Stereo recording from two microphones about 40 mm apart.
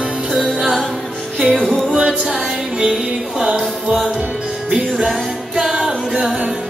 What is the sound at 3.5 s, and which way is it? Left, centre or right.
Music, right.